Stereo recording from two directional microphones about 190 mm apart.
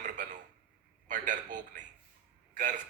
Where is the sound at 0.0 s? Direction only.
40° right (ahead or behind).